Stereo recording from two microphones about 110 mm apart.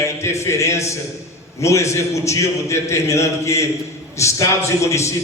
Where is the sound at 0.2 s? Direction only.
25° left (ahead or behind).